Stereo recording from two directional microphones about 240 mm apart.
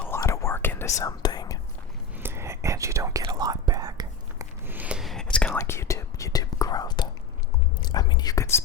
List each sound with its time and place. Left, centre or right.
0.0 s whispering: centre
2.2 s whispering: centre
7.8 s speech: centre